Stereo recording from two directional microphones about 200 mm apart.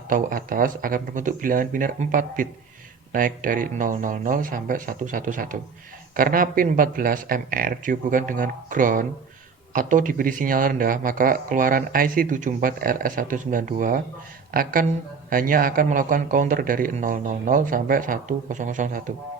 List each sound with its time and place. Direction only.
0.1 s speech: 45° right (ahead or behind)